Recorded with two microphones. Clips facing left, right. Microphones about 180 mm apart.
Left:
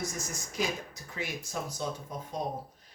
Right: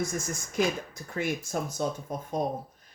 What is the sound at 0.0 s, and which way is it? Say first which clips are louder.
Speech: right 5 dB; 50° right (ahead or behind).